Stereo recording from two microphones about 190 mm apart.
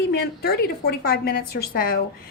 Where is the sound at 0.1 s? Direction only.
55° left (ahead or behind).